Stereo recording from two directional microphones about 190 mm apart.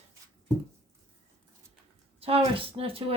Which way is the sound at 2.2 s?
30° right (ahead or behind).